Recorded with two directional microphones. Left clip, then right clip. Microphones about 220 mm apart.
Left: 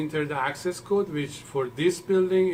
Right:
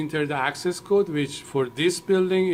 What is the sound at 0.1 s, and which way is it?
Speech, 40° right (ahead or behind).